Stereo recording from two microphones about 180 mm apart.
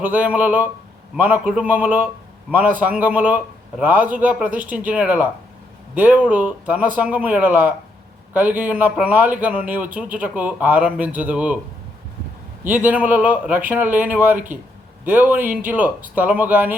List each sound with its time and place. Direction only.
0.0 s a man's voice: 10° right (ahead or behind)
12.6 s a man's voice: 10° right (ahead or behind)